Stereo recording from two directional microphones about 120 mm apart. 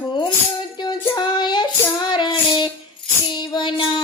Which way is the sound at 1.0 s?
40° left (ahead or behind).